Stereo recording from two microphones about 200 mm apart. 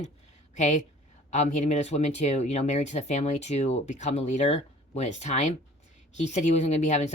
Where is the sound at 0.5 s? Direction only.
35° left (ahead or behind).